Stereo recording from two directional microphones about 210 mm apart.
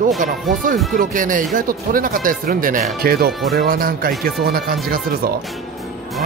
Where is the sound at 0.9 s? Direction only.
40° right (ahead or behind).